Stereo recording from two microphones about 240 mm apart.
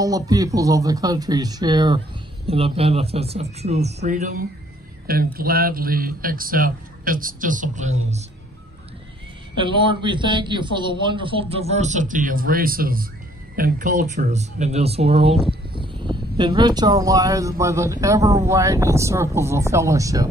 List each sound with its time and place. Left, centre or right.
0.0 s a man's voice: centre; by 7.9 s right
9.6 s a man's voice: right